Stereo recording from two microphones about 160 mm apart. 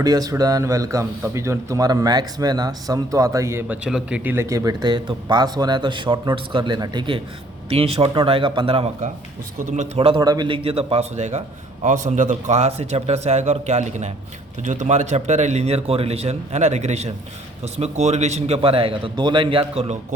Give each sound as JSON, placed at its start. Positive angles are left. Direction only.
{"t": 0.0, "sound": "speech", "side_deg": -20}
{"t": 7.7, "sound": "a man's voice", "side_deg": -40}
{"t": 10.2, "sound": "a man's voice", "side_deg": -25}